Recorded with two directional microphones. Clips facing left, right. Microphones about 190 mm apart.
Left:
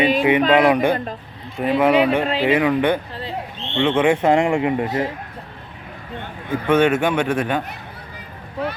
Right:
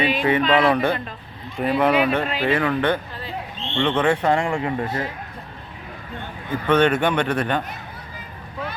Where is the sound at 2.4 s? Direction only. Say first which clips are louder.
Left 4 dB; 15° left (ahead or behind).